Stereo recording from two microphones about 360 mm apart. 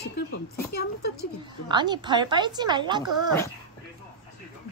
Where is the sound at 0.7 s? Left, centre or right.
Left.